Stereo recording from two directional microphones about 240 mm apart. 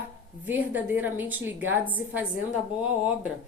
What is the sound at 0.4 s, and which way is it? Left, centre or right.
A woman's voice, centre.